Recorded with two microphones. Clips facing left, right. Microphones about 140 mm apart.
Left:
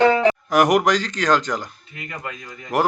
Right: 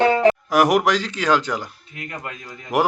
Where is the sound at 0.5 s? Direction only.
Centre (ahead or behind).